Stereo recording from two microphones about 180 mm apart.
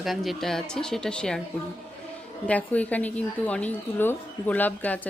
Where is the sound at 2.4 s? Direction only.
10° left (ahead or behind).